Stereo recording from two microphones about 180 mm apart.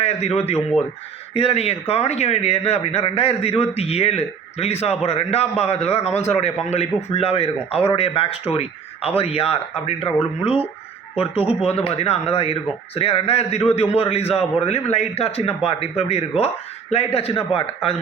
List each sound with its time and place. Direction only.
0.0 s speech: 35° left (ahead or behind)